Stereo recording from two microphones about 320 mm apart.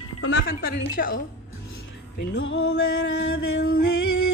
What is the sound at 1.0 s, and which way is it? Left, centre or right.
Speech, left.